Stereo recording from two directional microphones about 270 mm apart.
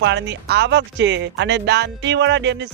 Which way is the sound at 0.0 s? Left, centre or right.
Right.